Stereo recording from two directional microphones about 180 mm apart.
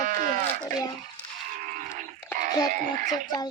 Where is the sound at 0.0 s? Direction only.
45° right (ahead or behind).